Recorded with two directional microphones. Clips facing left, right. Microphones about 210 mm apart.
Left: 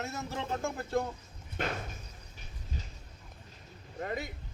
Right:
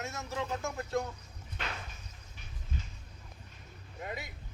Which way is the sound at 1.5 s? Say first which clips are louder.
Left 7 dB; 45° left (ahead or behind).